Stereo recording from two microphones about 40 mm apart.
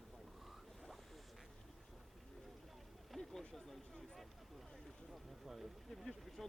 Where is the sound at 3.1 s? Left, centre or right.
Centre.